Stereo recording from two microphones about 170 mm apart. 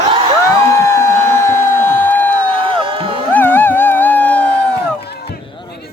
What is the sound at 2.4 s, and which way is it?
Music, 30° right (ahead or behind).